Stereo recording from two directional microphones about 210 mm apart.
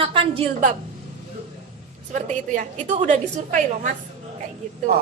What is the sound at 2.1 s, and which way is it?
A woman's voice, 35° right (ahead or behind).